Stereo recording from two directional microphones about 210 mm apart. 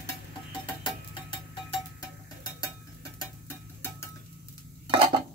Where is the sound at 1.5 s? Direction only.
20° left (ahead or behind).